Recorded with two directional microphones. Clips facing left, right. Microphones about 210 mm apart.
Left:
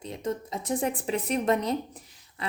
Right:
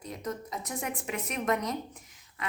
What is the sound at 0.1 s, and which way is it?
A woman's voice, 25° left (ahead or behind).